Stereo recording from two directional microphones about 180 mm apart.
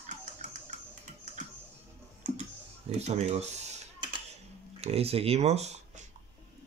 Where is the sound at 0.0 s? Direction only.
45° right (ahead or behind).